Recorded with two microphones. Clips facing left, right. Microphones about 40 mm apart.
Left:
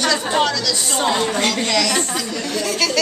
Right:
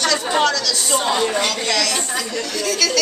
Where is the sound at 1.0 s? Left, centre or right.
Centre.